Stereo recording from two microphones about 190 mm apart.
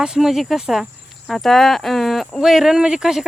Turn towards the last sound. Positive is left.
turn(degrees=0)  # may be behind; listen again after turning